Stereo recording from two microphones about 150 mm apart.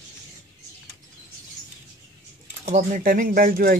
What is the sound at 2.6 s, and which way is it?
Speech, 60° right (ahead or behind).